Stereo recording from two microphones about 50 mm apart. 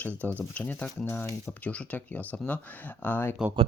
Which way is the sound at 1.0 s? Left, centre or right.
Left.